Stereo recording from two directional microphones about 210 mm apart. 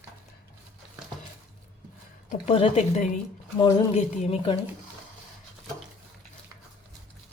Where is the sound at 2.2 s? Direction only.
30° left (ahead or behind).